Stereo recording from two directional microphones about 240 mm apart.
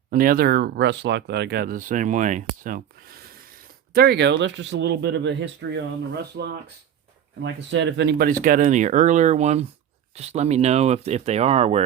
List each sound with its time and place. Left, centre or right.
0.1 s speech: right